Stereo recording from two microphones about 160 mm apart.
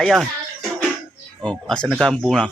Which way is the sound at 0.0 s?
Centre (ahead or behind).